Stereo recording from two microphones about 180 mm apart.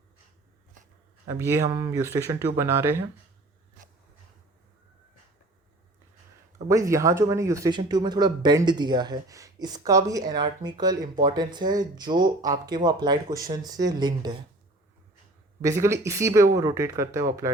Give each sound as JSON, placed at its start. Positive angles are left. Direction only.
{"t": 1.3, "sound": "speech", "side_deg": -15}
{"t": 6.7, "sound": "speech", "side_deg": -15}
{"t": 15.6, "sound": "speech", "side_deg": -15}